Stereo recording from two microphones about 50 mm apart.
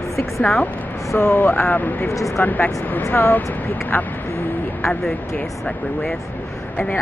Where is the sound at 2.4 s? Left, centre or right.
Left.